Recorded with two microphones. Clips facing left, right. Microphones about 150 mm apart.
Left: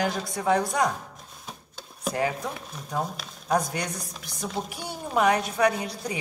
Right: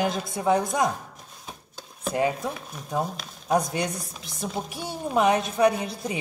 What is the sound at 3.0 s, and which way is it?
Speech, 5° right (ahead or behind).